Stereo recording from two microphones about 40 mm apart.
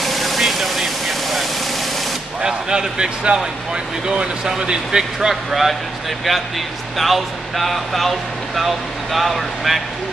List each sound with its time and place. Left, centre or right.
0.0 s vehicle: centre
2.4 s a man's voice: centre
5.3 s speech: centre
7.0 s speech: centre